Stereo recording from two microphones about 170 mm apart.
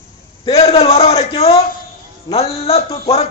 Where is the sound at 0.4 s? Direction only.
35° left (ahead or behind).